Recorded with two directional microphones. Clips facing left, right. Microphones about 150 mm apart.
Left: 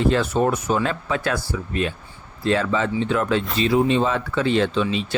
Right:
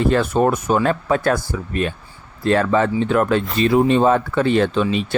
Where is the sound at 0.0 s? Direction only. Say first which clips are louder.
Right 3 dB; 50° right (ahead or behind).